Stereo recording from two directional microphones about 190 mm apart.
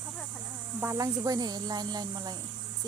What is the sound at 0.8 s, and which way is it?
Speech, 15° right (ahead or behind).